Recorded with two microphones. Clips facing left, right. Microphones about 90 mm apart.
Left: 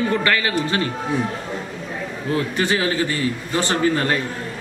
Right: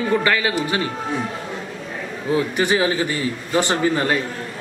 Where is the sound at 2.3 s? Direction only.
15° right (ahead or behind).